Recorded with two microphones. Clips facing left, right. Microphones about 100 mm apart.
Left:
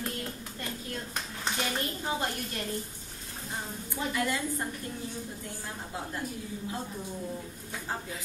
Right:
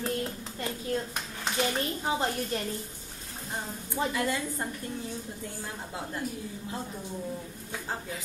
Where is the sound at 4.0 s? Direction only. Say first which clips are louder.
Right 4 dB; 35° right (ahead or behind).